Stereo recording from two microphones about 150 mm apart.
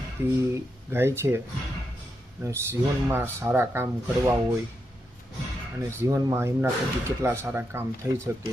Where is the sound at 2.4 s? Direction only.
15° right (ahead or behind).